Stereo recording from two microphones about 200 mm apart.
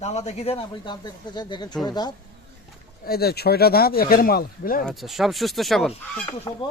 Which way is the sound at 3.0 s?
50° left (ahead or behind).